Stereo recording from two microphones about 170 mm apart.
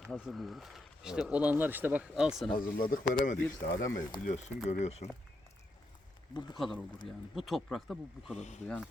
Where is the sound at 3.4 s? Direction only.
20° left (ahead or behind).